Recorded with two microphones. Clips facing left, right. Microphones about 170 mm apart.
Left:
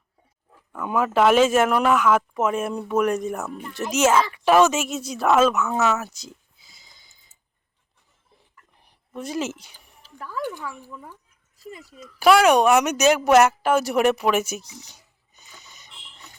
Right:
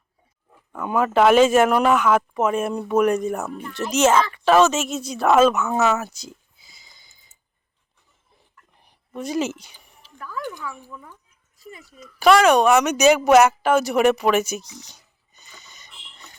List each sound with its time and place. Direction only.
0.8 s speech: centre (ahead or behind)
5.8 s a sound: centre (ahead or behind)
8.8 s a woman's voice: centre (ahead or behind)
10.2 s speech: 30° left (ahead or behind)
12.2 s speech: 5° left (ahead or behind)